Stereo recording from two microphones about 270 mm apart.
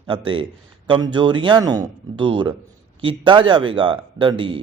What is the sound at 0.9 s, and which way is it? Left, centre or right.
A man's voice, centre.